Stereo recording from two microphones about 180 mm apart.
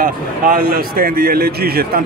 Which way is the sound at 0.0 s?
55° right (ahead or behind).